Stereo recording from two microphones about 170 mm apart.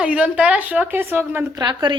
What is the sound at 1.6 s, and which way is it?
Speech, 25° right (ahead or behind).